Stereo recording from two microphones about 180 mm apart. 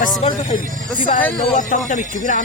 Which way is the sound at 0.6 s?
50° right (ahead or behind).